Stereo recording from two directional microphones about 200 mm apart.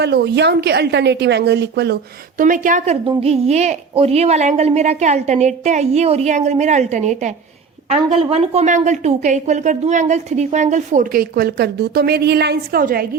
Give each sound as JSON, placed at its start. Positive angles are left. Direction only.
{"t": 0.0, "sound": "a woman's voice", "side_deg": -55}
{"t": 2.4, "sound": "a woman's voice", "side_deg": -40}